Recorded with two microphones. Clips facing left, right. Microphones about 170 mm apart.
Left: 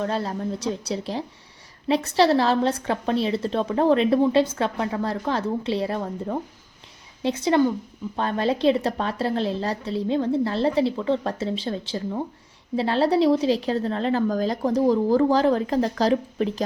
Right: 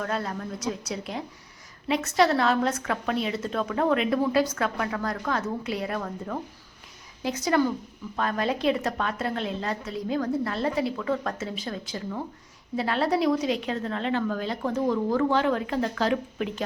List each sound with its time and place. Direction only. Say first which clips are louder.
0.0 s a woman's voice: left 4 dB; 30° left (ahead or behind)